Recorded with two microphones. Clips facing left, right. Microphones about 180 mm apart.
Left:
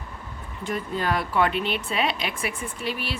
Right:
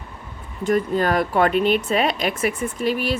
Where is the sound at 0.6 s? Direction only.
45° right (ahead or behind).